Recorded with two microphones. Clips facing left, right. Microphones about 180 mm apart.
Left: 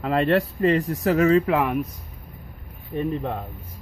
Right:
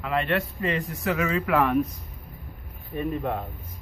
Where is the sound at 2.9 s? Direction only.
25° left (ahead or behind).